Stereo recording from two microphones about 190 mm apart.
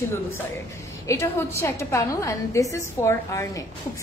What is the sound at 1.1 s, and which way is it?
A woman's voice, 15° left (ahead or behind).